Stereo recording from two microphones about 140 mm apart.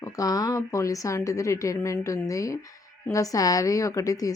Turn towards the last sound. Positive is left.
turn(degrees=25)  # may be behind; listen again after turning